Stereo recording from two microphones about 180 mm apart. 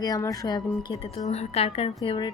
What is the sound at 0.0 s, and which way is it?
Speech, 20° left (ahead or behind).